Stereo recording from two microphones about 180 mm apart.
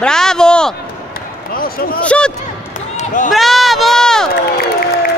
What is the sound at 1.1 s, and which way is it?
Basketball bounce, 55° left (ahead or behind).